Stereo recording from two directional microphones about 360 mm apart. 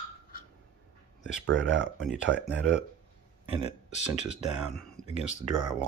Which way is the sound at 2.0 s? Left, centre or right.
Centre.